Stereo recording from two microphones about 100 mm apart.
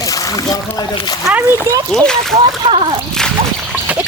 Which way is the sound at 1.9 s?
5° left (ahead or behind).